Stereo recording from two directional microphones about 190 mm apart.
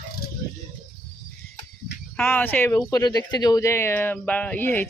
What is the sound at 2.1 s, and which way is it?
Speech, 10° left (ahead or behind).